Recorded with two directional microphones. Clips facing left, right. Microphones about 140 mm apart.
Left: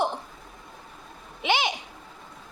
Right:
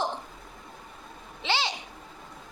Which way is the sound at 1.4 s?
15° left (ahead or behind).